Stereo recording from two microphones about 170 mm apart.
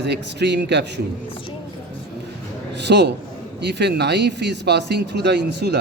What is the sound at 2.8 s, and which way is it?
Speech, 85° right.